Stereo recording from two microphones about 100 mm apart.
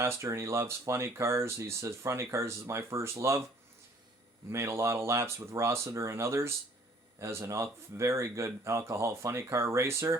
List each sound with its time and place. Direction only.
0.2 s speech: 30° right (ahead or behind)
4.5 s speech: 30° right (ahead or behind)